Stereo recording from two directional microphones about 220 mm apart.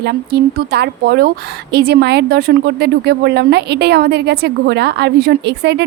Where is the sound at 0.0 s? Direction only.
45° right (ahead or behind).